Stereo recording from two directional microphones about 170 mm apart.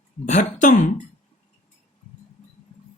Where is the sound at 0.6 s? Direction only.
45° left (ahead or behind).